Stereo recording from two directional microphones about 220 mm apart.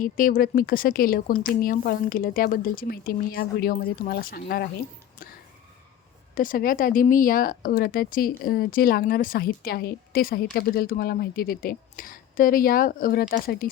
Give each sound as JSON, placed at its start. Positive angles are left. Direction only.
{"t": 0.0, "sound": "speech", "side_deg": 40}
{"t": 6.3, "sound": "speech", "side_deg": 40}